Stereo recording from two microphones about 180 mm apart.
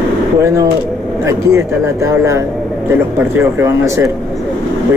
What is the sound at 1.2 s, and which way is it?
Speech, 15° right (ahead or behind).